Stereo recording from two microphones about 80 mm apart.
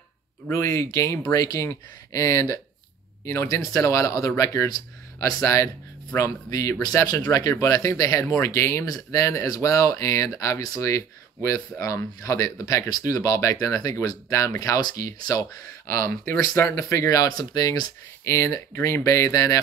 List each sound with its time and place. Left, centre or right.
0.5 s speech: left
17.4 s speech: left
18.3 s speech: left